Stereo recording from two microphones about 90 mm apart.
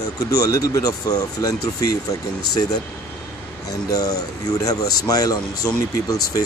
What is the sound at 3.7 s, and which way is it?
Speech, 40° left (ahead or behind).